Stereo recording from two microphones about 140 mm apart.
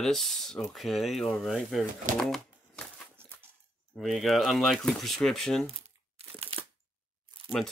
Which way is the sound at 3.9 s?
Centre (ahead or behind).